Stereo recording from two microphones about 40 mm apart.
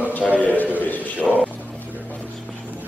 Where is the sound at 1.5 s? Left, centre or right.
Left.